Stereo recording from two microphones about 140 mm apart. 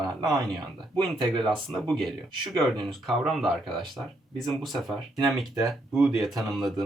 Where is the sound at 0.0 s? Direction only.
25° right (ahead or behind).